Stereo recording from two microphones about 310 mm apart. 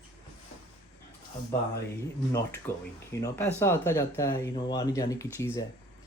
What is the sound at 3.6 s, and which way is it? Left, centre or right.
Speech, centre.